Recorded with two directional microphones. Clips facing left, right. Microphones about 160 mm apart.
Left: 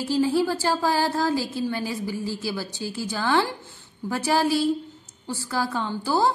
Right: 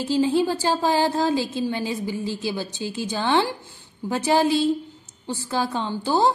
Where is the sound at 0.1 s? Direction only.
20° right (ahead or behind).